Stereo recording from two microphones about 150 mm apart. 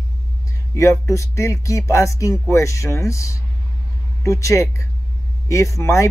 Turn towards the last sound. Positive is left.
turn(degrees=20)  # may be behind; listen again after turning